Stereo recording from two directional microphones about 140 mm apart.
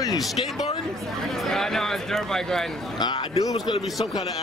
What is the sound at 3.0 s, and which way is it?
Speech, 30° left (ahead or behind).